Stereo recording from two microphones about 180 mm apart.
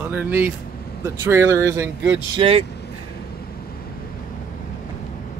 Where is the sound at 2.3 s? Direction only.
30° right (ahead or behind).